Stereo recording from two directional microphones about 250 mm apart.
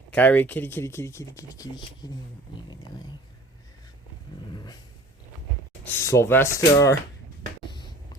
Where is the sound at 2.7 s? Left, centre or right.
Centre.